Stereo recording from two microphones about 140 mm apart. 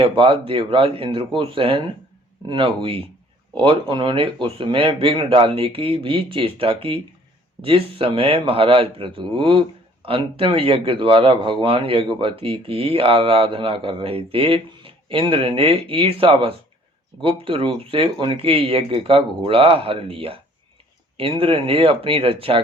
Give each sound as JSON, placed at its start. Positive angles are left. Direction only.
{"t": 0.0, "sound": "speech", "side_deg": -40}